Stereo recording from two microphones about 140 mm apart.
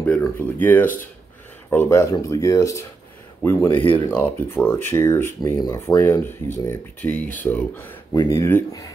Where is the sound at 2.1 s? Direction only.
25° left (ahead or behind).